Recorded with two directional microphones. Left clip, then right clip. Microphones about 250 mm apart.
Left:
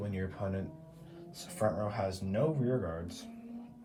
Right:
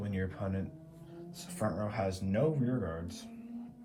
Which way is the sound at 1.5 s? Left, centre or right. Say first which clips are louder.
Left 2 dB; centre.